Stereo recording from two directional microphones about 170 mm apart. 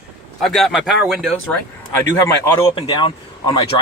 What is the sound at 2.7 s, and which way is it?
Speech, 30° left (ahead or behind).